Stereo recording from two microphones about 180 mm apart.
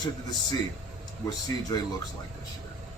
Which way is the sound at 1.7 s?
20° left (ahead or behind).